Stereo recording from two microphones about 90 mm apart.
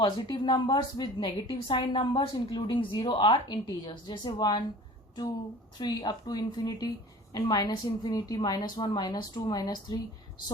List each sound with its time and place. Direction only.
0.0 s a woman's voice: 55° left (ahead or behind)
5.8 s a woman's voice: 50° left (ahead or behind)